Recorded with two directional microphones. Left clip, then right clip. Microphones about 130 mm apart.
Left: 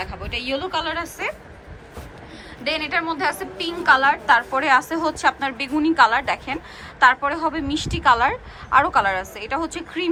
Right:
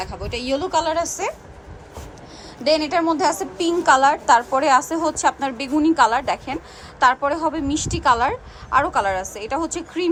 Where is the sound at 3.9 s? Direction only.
30° right (ahead or behind).